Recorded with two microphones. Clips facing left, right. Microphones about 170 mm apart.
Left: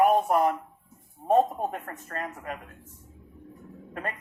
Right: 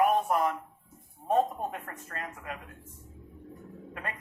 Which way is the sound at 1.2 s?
45° left (ahead or behind).